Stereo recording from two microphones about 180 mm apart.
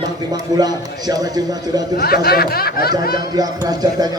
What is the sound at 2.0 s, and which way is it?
Speech, 60° left (ahead or behind).